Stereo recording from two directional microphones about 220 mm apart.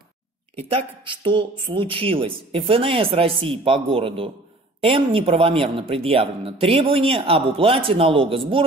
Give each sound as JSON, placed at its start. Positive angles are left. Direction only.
{"t": 0.6, "sound": "speech", "side_deg": -25}